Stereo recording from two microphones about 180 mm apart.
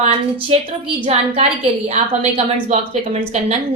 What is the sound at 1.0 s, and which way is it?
Speech, 35° right (ahead or behind).